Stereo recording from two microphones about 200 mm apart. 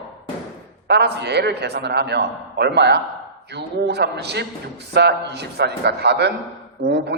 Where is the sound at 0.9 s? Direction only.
55° right (ahead or behind).